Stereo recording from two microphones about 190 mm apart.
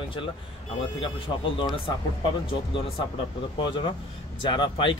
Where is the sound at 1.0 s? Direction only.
25° left (ahead or behind).